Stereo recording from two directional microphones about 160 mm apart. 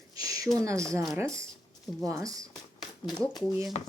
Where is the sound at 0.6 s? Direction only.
20° right (ahead or behind).